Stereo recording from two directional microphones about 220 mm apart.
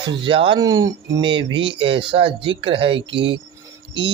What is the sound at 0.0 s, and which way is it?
Speech, 20° right (ahead or behind).